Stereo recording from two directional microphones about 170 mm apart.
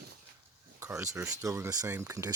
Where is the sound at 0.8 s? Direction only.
15° right (ahead or behind).